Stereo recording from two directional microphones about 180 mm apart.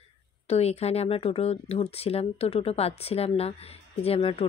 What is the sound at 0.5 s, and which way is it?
Speech, 35° left (ahead or behind).